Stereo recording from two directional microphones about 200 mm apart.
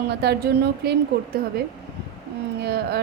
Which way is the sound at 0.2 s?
55° right (ahead or behind).